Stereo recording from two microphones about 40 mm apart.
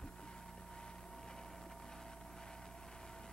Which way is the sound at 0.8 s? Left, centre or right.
Centre.